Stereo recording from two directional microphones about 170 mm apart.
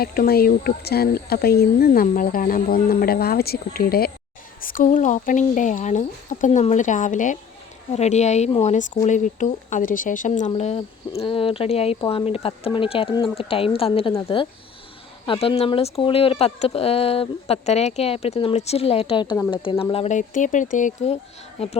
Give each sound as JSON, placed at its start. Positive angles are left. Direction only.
{"t": 0.0, "sound": "speech", "side_deg": 65}
{"t": 11.2, "sound": "speech", "side_deg": 30}